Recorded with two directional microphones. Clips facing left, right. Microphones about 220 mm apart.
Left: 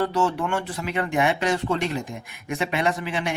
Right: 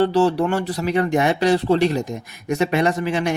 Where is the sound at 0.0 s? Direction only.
35° right (ahead or behind).